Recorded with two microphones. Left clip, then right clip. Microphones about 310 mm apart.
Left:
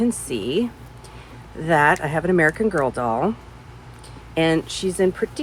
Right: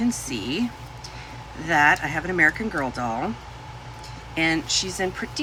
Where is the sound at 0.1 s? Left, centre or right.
Centre.